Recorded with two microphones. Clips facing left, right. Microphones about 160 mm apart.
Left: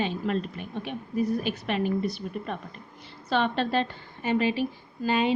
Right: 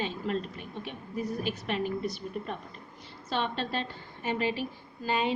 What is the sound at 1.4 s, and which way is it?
A woman's voice, 70° left (ahead or behind).